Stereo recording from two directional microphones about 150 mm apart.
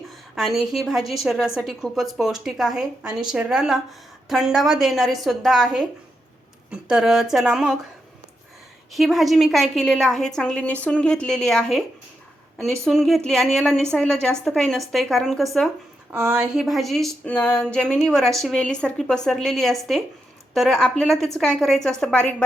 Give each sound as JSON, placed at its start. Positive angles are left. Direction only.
{"t": 0.3, "sound": "a woman's voice", "side_deg": 0}
{"t": 8.9, "sound": "a woman's voice", "side_deg": 0}